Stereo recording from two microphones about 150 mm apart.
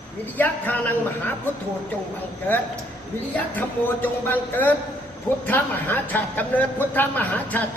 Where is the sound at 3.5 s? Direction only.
10° left (ahead or behind).